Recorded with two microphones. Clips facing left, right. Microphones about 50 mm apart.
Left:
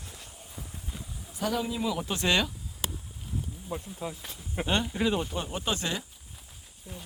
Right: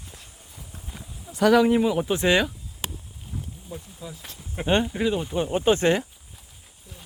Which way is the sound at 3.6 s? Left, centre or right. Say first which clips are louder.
Left 3 dB; left.